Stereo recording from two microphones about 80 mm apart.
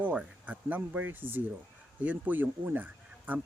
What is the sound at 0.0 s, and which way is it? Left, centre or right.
Speech, centre.